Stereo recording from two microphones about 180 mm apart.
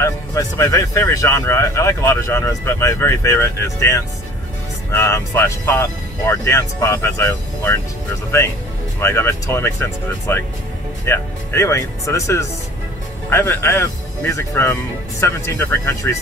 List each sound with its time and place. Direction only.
0.0 s speech: 15° left (ahead or behind)
9.0 s speech: 15° left (ahead or behind)